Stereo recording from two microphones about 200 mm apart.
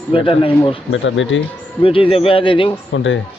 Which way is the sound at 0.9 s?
70° left (ahead or behind).